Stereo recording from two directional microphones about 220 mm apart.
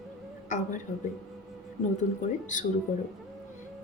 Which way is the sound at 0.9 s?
35° left (ahead or behind).